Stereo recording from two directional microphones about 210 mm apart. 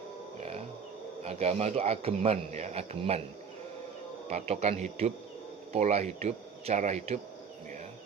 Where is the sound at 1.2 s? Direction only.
30° right (ahead or behind).